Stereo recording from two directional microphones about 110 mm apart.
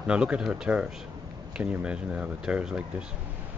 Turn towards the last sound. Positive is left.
turn(degrees=-10)  # may be behind; listen again after turning